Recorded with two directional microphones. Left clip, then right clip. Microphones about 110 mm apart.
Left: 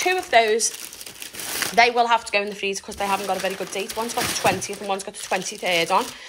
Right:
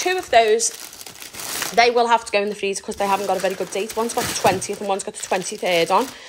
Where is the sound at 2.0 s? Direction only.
45° right (ahead or behind).